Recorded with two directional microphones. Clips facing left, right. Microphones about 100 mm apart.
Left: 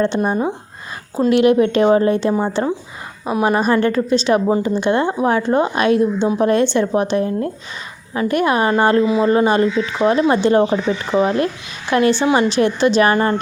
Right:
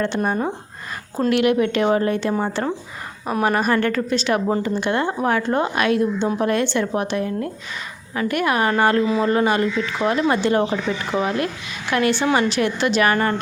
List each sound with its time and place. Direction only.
0.0 s a woman's voice: 20° left (ahead or behind)